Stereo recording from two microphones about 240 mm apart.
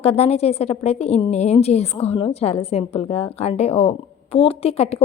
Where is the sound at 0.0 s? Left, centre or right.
Left.